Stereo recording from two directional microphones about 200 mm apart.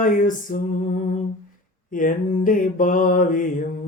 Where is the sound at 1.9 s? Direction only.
40° left (ahead or behind).